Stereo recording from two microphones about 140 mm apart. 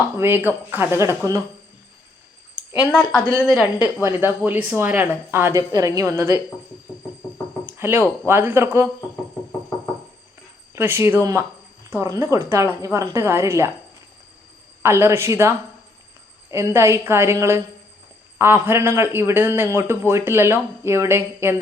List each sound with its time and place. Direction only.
0.2 s a man's voice: 15° right (ahead or behind)
2.9 s a woman's voice: 5° left (ahead or behind)
4.0 s a man's voice: 15° right (ahead or behind)
7.6 s a sound: 15° right (ahead or behind)
8.3 s a man's voice: 15° right (ahead or behind)
10.8 s a man's voice: 15° right (ahead or behind)
14.8 s a man's voice: 20° right (ahead or behind)